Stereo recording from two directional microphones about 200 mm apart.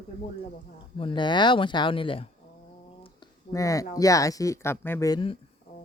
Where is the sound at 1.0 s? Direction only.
25° left (ahead or behind).